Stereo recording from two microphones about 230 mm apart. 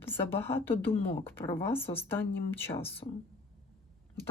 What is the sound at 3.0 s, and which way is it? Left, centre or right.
Speech, left.